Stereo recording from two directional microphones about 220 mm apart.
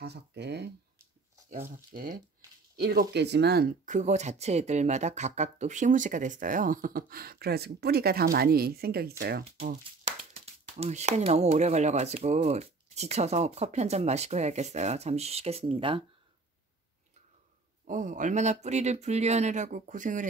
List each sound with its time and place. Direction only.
0.0 s speech: 50° right (ahead or behind)
1.9 s speech: 40° right (ahead or behind)
10.0 s speech: 25° right (ahead or behind)
17.8 s speech: 35° right (ahead or behind)